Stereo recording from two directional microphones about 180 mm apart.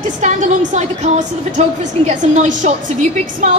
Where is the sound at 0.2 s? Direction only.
40° right (ahead or behind).